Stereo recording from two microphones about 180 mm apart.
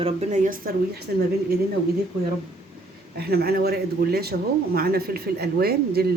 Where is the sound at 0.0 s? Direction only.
40° right (ahead or behind).